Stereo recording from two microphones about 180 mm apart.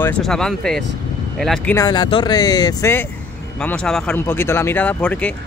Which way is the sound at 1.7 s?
20° left (ahead or behind).